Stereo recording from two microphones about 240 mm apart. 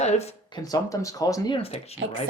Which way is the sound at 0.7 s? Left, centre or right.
Centre.